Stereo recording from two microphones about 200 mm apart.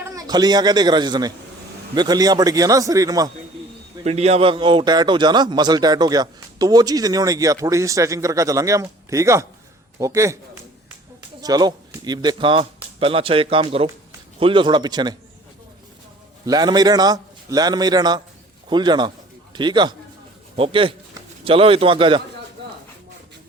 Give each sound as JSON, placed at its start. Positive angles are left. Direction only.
{"t": 0.0, "sound": "a man's voice", "side_deg": -20}
{"t": 4.0, "sound": "a man's voice", "side_deg": -30}
{"t": 11.3, "sound": "a man's voice", "side_deg": -20}
{"t": 16.5, "sound": "a man's voice", "side_deg": -20}